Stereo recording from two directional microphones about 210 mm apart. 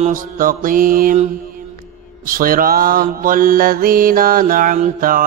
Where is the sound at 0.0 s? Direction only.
40° right (ahead or behind).